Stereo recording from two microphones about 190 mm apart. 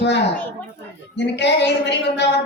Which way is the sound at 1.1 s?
65° left (ahead or behind).